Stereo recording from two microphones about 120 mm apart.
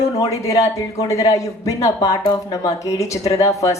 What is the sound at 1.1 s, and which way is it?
A woman's voice, 25° left (ahead or behind).